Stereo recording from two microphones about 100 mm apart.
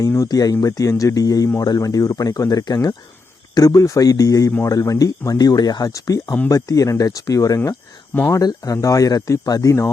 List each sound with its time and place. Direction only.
0.3 s speech: 40° left (ahead or behind)